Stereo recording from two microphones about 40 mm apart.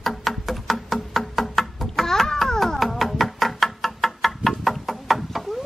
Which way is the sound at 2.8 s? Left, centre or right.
Centre.